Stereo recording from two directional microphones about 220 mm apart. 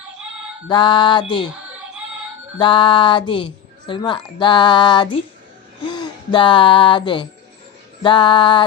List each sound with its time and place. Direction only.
0.7 s speech: 20° left (ahead or behind)
2.6 s speech: 20° left (ahead or behind)